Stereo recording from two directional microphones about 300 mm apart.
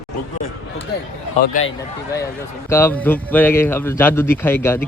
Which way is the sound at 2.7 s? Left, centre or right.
Centre.